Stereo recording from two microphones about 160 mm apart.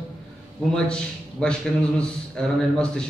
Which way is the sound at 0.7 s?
5° left (ahead or behind).